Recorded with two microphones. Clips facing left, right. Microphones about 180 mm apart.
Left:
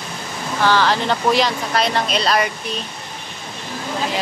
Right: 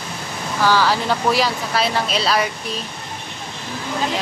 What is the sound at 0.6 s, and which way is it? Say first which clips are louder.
Speech: even; 10° right (ahead or behind).